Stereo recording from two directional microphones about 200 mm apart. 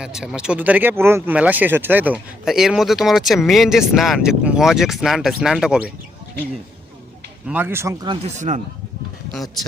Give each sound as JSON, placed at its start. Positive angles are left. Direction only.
{"t": 0.0, "sound": "speech", "side_deg": 0}
{"t": 7.4, "sound": "speech", "side_deg": -10}
{"t": 8.4, "sound": "a man's voice", "side_deg": -35}